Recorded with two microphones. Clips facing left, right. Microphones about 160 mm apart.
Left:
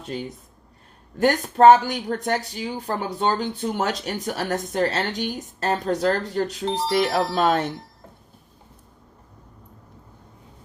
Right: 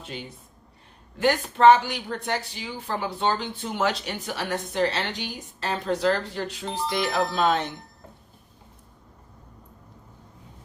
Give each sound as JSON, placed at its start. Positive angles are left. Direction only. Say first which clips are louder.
{"t": 1.2, "sound": "a woman's voice", "louder": "left 3 dB", "side_deg": 45}